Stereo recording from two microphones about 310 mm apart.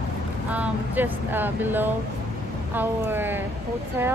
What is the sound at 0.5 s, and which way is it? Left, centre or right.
A woman's voice, centre.